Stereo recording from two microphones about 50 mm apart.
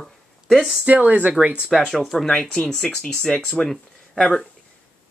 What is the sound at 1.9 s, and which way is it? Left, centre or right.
Speech, centre.